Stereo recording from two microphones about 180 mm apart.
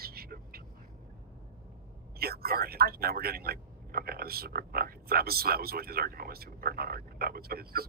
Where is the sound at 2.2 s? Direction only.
55° right (ahead or behind).